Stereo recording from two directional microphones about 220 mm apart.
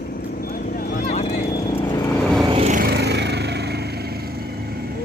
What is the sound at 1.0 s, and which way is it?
Vehicle, 30° left (ahead or behind).